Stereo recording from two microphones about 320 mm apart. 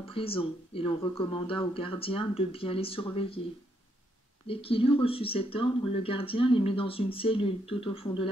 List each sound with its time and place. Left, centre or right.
0.0 s speech: centre
4.5 s speech: centre